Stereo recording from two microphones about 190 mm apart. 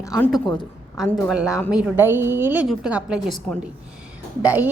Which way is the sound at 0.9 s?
Centre (ahead or behind).